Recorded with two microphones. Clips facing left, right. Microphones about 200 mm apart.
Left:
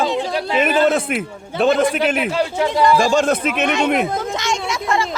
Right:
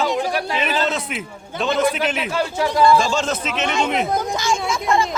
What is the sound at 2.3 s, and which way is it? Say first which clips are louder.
Speech: left 2 dB; 15° left (ahead or behind).